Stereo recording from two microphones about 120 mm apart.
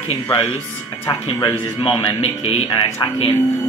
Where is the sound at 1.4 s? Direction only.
40° left (ahead or behind).